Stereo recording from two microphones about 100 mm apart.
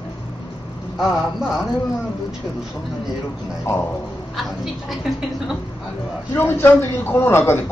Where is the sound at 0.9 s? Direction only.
5° right (ahead or behind).